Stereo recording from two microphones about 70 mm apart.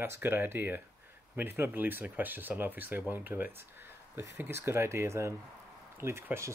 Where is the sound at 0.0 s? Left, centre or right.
Right.